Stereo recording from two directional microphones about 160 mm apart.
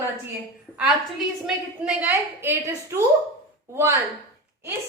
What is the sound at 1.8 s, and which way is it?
A woman's voice, 15° right (ahead or behind).